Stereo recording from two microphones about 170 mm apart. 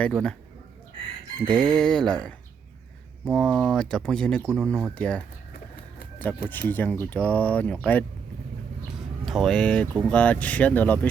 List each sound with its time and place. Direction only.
0.0 s speech: 5° left (ahead or behind)
1.5 s chicken: 25° right (ahead or behind)
1.8 s speech: 5° left (ahead or behind)